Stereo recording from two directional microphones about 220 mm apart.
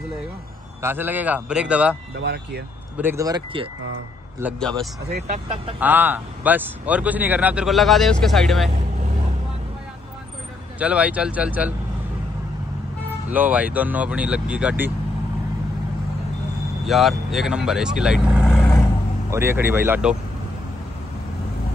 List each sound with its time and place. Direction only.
0.8 s speech: 10° right (ahead or behind)
2.2 s speech: 45° right (ahead or behind)
3.0 s speech: 10° right (ahead or behind)
4.6 s a man's voice: centre (ahead or behind)
5.1 s speech: 30° right (ahead or behind)
5.8 s a man's voice: 10° right (ahead or behind)
10.8 s a man's voice: 5° right (ahead or behind)
13.3 s speech: 5° right (ahead or behind)
16.8 s speech: centre (ahead or behind)